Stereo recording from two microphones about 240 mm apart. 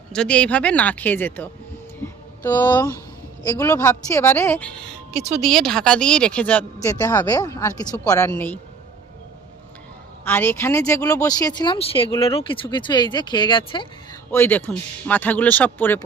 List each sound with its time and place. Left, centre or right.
0.1 s speech: centre
2.0 s a sound: centre
3.6 s speech: centre
10.2 s speech: centre
14.3 s speech: centre